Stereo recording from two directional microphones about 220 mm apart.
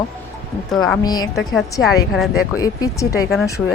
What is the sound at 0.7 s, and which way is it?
Speech, centre (ahead or behind).